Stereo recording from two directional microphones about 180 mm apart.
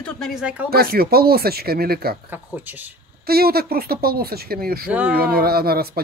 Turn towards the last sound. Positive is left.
turn(degrees=-60)  # may be behind; listen again after turning